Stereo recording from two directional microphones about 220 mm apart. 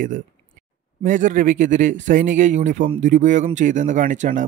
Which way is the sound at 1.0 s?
35° right (ahead or behind).